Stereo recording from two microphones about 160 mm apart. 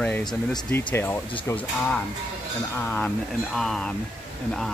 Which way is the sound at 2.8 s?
15° left (ahead or behind).